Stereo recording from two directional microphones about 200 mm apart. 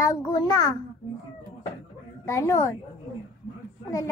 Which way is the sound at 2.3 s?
15° left (ahead or behind).